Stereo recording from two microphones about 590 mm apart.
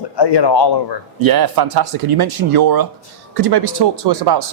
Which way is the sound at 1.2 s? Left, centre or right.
Right.